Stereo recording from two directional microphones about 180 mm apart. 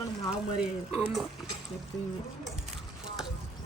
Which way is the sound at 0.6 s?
Centre (ahead or behind).